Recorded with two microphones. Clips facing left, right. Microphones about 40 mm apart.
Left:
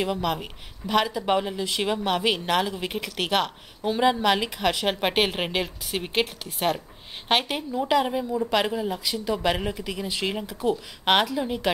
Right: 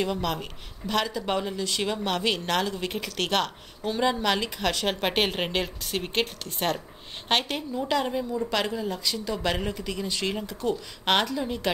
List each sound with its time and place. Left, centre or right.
0.0 s speech: centre